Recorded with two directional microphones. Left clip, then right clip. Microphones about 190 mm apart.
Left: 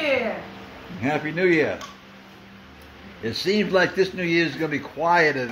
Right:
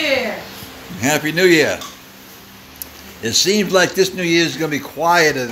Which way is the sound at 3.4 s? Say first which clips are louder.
Right 5 dB; 15° right (ahead or behind).